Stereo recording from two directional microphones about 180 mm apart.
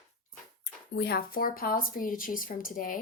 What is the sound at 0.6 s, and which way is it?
Speech, 65° left (ahead or behind).